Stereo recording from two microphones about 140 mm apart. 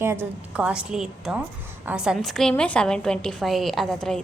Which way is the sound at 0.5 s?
10° right (ahead or behind).